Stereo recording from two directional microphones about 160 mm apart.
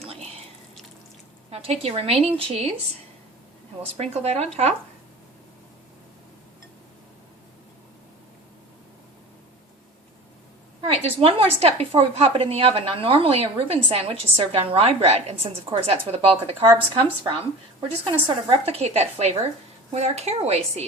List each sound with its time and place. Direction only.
0.0 s whispering: 40° right (ahead or behind)
1.5 s a woman's voice: 40° right (ahead or behind)
3.9 s a woman's voice: 40° right (ahead or behind)
10.8 s a woman's voice: 35° right (ahead or behind)